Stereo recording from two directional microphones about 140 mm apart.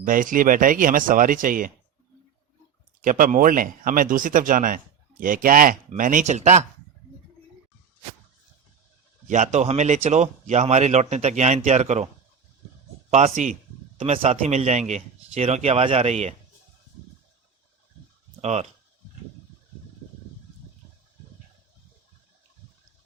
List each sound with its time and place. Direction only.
0.0 s speech: 75° right (ahead or behind)
3.0 s speech: 75° right (ahead or behind); by 6.7 s 55° right (ahead or behind)
9.2 s speech: 60° right (ahead or behind)
13.1 s speech: 55° right (ahead or behind)
14.0 s a man's voice: 45° right (ahead or behind)
18.3 s speech: 50° right (ahead or behind)